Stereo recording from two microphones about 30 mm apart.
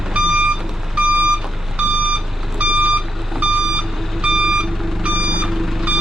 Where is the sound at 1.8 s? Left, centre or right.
Right.